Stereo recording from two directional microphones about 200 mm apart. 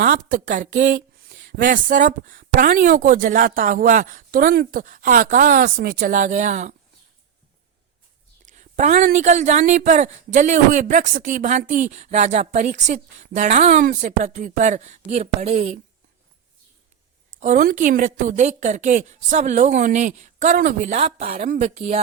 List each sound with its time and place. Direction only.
0.0 s speech: 45° right (ahead or behind)
8.4 s speech: 40° right (ahead or behind)
17.4 s speech: 40° right (ahead or behind)
20.9 s speech: 30° right (ahead or behind)